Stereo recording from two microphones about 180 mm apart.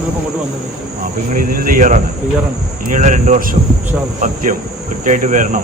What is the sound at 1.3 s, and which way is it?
Speech, 50° right (ahead or behind).